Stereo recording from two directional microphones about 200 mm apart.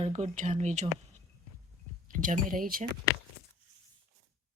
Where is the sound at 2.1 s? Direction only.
40° right (ahead or behind).